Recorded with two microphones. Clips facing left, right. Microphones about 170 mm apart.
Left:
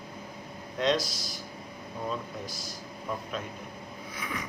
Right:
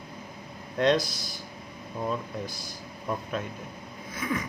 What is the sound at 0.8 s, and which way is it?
Speech, 55° right (ahead or behind).